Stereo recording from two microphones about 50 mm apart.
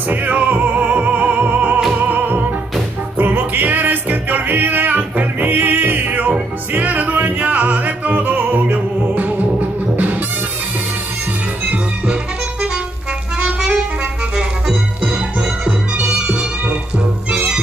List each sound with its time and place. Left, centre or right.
0.1 s music: right
11.6 s music: right
14.3 s music: centre